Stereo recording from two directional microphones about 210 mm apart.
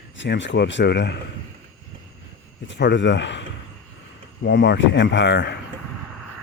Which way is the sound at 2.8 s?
55° left (ahead or behind).